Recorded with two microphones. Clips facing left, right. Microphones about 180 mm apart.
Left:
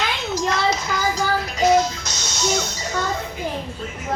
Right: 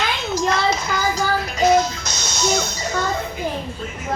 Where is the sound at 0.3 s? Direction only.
55° right (ahead or behind).